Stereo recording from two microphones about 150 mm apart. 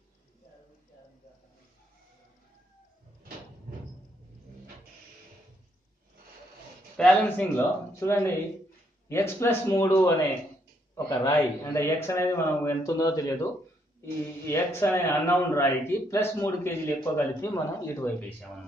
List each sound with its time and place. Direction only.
7.0 s a man's voice: 10° left (ahead or behind)